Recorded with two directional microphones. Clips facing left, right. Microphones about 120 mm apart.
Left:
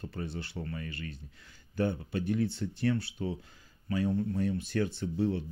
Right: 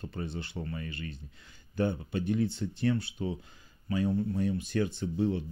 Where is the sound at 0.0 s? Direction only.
20° right (ahead or behind).